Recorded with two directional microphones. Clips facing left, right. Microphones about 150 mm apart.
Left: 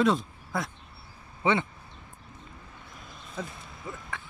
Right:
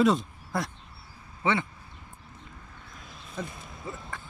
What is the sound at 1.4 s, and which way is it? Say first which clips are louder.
Speech: left 2 dB; 15° left (ahead or behind).